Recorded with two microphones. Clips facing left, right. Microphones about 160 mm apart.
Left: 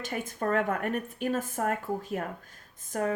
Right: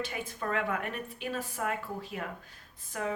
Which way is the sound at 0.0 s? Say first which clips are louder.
Left 4 dB; 45° left (ahead or behind).